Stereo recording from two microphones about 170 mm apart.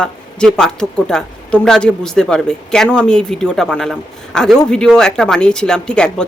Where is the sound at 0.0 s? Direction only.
5° left (ahead or behind).